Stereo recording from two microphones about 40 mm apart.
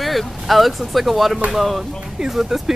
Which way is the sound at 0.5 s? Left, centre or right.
Centre.